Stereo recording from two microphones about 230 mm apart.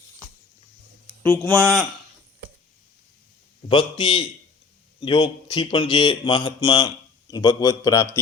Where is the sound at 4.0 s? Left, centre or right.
Left.